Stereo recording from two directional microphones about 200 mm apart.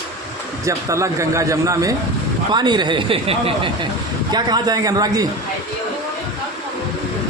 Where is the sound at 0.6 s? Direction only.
15° right (ahead or behind).